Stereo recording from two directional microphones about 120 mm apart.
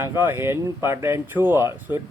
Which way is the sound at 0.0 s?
20° right (ahead or behind).